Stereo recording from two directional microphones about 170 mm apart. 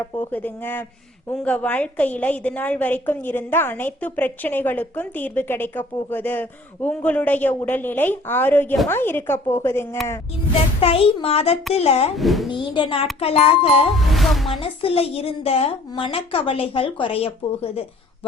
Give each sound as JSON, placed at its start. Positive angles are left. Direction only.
{"t": 0.0, "sound": "a woman's voice", "side_deg": 10}
{"t": 10.8, "sound": "a woman's voice", "side_deg": 35}
{"t": 12.1, "sound": "speech", "side_deg": 0}
{"t": 12.5, "sound": "a woman's voice", "side_deg": 30}
{"t": 14.1, "sound": "speech", "side_deg": 0}
{"t": 14.6, "sound": "a woman's voice", "side_deg": 35}